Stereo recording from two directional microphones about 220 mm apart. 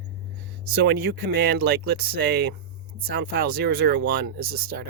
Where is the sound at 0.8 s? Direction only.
50° right (ahead or behind).